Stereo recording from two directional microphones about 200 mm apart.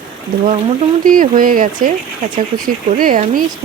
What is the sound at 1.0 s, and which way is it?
Speech, 45° right (ahead or behind).